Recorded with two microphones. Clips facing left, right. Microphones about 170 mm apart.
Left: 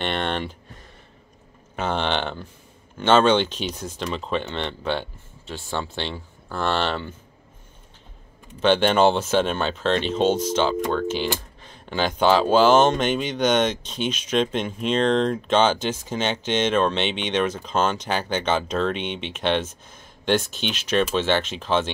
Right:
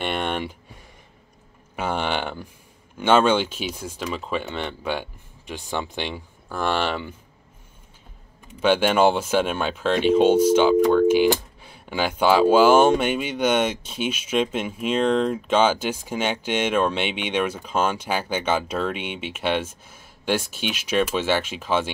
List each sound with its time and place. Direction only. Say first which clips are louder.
0.0 s a sound: even; 10° right (ahead or behind)
1.8 s speech: left 1 dB; 10° right (ahead or behind)
8.5 s speech: even; 10° right (ahead or behind)